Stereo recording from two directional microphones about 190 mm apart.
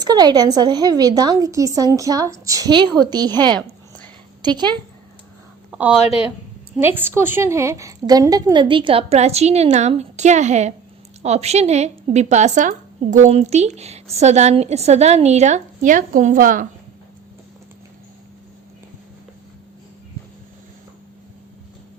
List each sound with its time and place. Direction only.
0.0 s a woman's voice: 20° right (ahead or behind)
5.7 s speech: 5° right (ahead or behind)
6.0 s speech: 30° left (ahead or behind)
6.7 s a woman's voice: 10° right (ahead or behind); by 16.6 s 45° right (ahead or behind)